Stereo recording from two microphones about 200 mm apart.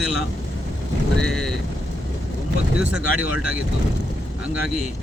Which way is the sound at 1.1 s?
5° left (ahead or behind).